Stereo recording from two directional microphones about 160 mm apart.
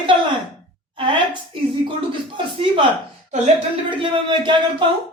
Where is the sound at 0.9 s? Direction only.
30° right (ahead or behind).